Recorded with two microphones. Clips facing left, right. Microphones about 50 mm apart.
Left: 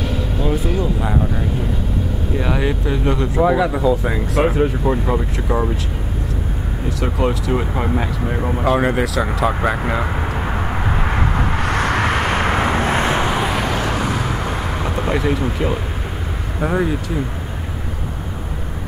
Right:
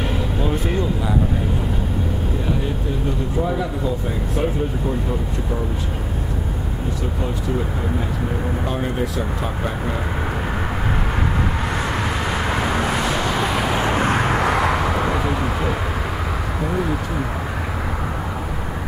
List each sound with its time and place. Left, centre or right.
2.5 s speech: left
7.0 s speech: left
11.6 s vehicle: left
12.6 s vehicle: left
13.4 s vehicle: centre
13.7 s vehicle: centre
13.9 s vehicle: right
14.4 s vehicle: right